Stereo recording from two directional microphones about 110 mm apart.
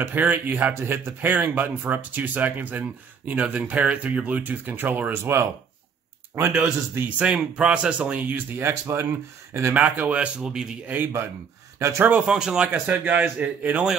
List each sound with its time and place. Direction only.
0.0 s speech: 15° right (ahead or behind)
12.3 s speech: 5° right (ahead or behind)